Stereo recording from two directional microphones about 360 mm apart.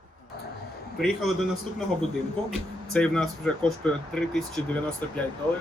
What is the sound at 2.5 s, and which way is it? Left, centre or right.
Speech, centre.